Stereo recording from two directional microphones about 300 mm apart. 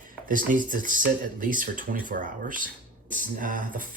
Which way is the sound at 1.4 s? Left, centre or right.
Right.